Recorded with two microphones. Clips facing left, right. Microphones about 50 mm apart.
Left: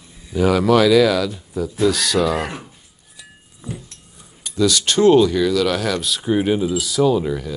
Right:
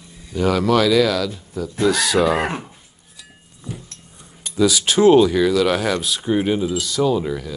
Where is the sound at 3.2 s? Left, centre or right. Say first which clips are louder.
Left 2 dB; centre.